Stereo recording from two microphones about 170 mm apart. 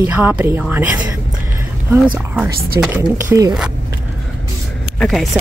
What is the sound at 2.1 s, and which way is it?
Speech, 5° right (ahead or behind).